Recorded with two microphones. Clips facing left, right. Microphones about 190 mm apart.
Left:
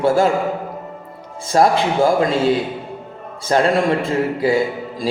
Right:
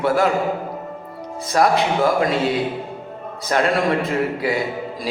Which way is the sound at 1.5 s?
30° left (ahead or behind).